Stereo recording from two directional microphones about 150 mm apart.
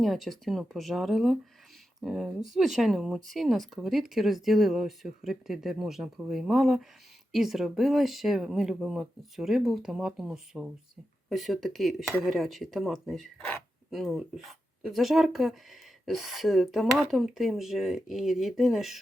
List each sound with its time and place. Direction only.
0.0 s speech: centre (ahead or behind)